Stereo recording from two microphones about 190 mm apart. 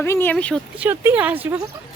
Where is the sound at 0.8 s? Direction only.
10° right (ahead or behind).